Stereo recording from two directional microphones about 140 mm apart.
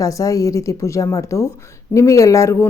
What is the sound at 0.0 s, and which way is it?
Speech, 25° left (ahead or behind).